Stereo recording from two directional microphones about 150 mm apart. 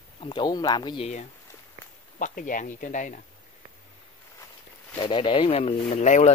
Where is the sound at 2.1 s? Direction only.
60° left (ahead or behind).